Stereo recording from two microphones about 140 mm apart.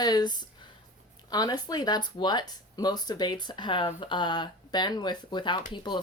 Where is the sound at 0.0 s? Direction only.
30° left (ahead or behind).